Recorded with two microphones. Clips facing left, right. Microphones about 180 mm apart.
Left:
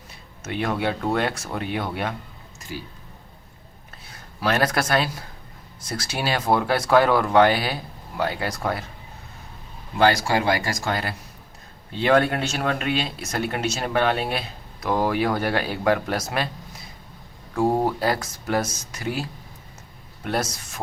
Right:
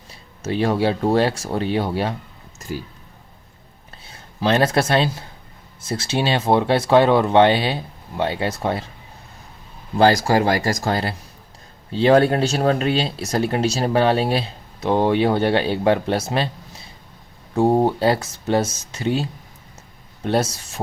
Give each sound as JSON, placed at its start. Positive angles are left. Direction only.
{"t": 0.1, "sound": "speech", "side_deg": -30}
{"t": 4.0, "sound": "speech", "side_deg": -25}
{"t": 10.0, "sound": "speech", "side_deg": -35}
{"t": 17.5, "sound": "speech", "side_deg": -25}